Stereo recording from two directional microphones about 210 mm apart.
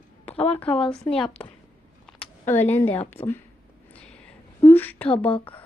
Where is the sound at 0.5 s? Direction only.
5° left (ahead or behind).